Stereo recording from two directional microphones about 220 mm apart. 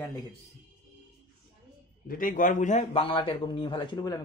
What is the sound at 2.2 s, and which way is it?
A man's voice, 35° left (ahead or behind).